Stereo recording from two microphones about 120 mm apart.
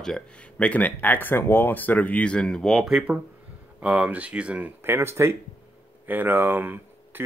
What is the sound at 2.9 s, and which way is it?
Speech, 10° right (ahead or behind).